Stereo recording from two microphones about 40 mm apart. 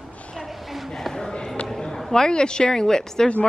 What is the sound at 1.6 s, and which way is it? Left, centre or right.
Speech, centre.